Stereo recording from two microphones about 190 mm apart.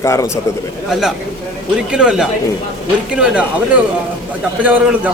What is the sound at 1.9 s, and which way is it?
Speech, 5° right (ahead or behind).